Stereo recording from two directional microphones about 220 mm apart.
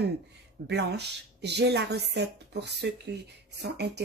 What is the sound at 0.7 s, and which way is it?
Speech, 50° right (ahead or behind).